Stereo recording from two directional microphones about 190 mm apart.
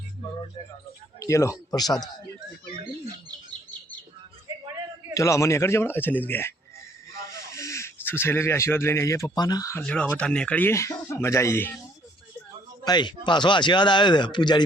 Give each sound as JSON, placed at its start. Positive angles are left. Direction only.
{"t": 1.2, "sound": "speech", "side_deg": 15}
{"t": 5.1, "sound": "speech", "side_deg": 15}
{"t": 9.8, "sound": "speech", "side_deg": 5}
{"t": 12.8, "sound": "speech", "side_deg": 20}